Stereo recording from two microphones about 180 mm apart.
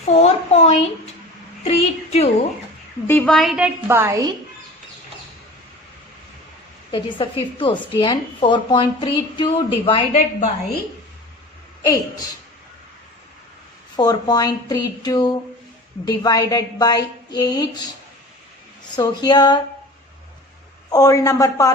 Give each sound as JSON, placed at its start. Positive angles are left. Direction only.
{"t": 0.1, "sound": "a woman's voice", "side_deg": 35}
{"t": 3.1, "sound": "a woman's voice", "side_deg": 5}
{"t": 3.8, "sound": "a woman's voice", "side_deg": -15}
{"t": 6.9, "sound": "a woman's voice", "side_deg": 30}
{"t": 11.8, "sound": "a woman's voice", "side_deg": 20}
{"t": 13.9, "sound": "a woman's voice", "side_deg": 25}
{"t": 18.9, "sound": "a woman's voice", "side_deg": 20}
{"t": 20.9, "sound": "a man's voice", "side_deg": 20}